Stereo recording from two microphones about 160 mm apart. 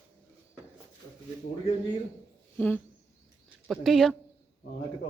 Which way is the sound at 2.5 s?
15° left (ahead or behind).